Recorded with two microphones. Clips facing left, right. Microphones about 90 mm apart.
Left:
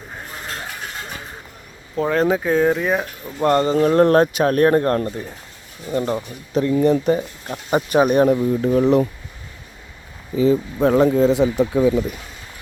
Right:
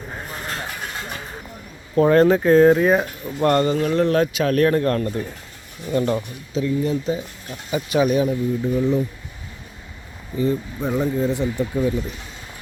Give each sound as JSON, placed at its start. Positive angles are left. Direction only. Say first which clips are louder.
{"t": 2.0, "sound": "speech", "louder": "right 4 dB", "side_deg": 0}
{"t": 3.4, "sound": "speech", "louder": "left 1 dB", "side_deg": 20}
{"t": 3.8, "sound": "speech", "louder": "left 5 dB", "side_deg": 35}
{"t": 5.9, "sound": "speech", "louder": "right 1 dB", "side_deg": 20}
{"t": 6.5, "sound": "speech", "louder": "left 5 dB", "side_deg": 50}
{"t": 10.3, "sound": "speech", "louder": "left 5 dB", "side_deg": 90}